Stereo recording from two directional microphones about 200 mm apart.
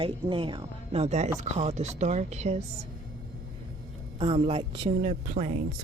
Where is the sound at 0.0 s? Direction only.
25° right (ahead or behind).